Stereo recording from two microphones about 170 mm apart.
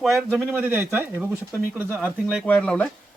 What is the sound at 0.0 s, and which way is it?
Speech, centre (ahead or behind).